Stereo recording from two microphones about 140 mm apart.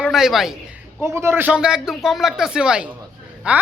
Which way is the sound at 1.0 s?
20° right (ahead or behind).